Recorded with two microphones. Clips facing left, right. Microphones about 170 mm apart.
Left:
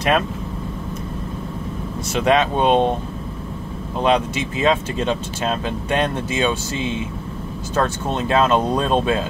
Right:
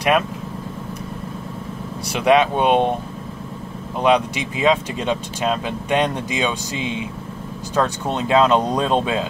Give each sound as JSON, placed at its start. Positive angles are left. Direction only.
{"t": 2.1, "sound": "speech", "side_deg": -15}
{"t": 4.0, "sound": "speech", "side_deg": -15}